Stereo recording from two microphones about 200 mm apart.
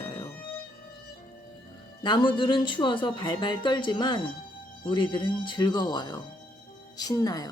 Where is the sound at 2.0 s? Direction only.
25° left (ahead or behind).